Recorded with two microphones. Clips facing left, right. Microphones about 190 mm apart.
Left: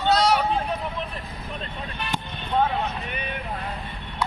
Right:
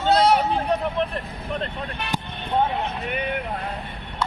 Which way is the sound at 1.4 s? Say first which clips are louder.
Right 6 dB; 70° right (ahead or behind).